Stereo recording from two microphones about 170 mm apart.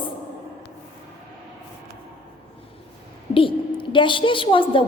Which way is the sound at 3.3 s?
30° left (ahead or behind).